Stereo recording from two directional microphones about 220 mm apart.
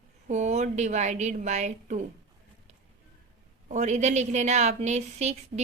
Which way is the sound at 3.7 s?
30° right (ahead or behind).